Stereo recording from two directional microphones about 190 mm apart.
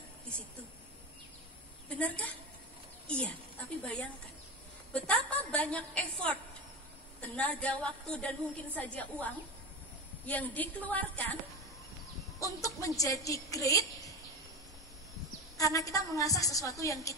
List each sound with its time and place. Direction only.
2.0 s a woman's voice: 5° left (ahead or behind)
12.4 s a woman's voice: 15° left (ahead or behind)
15.5 s a woman's voice: 15° left (ahead or behind)